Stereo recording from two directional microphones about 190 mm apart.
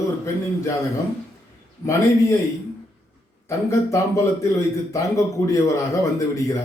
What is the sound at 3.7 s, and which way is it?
Speech, 15° left (ahead or behind).